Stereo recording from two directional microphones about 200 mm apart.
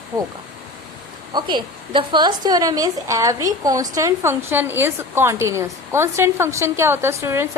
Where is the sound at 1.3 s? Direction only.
20° right (ahead or behind).